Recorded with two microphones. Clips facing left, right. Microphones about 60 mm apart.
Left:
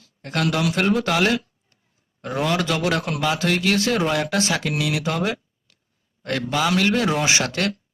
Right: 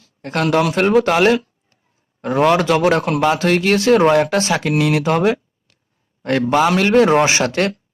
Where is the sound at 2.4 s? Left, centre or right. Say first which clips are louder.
Right 8 dB; right.